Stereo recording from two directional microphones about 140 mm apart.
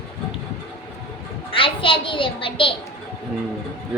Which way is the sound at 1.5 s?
40° left (ahead or behind).